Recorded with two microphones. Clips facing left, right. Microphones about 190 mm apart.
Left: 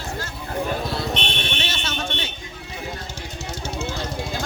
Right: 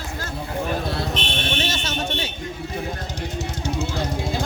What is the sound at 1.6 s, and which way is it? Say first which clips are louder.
Fire alarm: right 3 dB; 40° right (ahead or behind).